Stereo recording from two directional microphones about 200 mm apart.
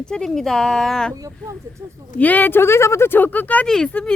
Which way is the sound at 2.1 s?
10° left (ahead or behind).